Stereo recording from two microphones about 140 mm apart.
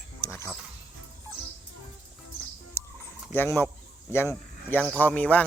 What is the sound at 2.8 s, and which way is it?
Fowl, 15° left (ahead or behind).